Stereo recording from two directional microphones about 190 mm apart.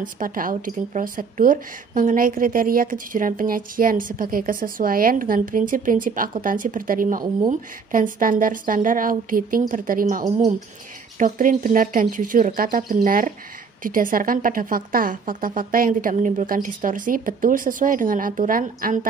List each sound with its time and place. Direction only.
0.0 s a woman's voice: 45° right (ahead or behind)